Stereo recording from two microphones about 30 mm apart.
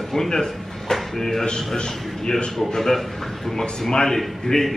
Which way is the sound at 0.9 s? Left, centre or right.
Centre.